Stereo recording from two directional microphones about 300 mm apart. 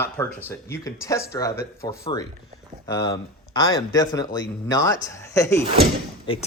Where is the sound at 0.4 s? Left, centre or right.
Centre.